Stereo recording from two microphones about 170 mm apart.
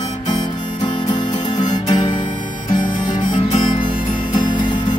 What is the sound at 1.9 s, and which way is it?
Harmonica, 25° left (ahead or behind).